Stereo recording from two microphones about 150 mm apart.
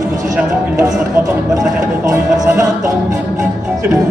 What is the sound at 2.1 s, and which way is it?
Music, 20° right (ahead or behind).